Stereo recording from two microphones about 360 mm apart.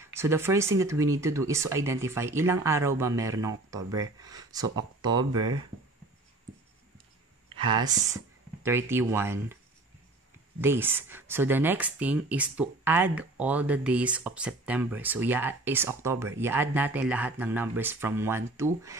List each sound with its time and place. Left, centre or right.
0.0 s speech: centre
7.5 s speech: centre
10.6 s speech: centre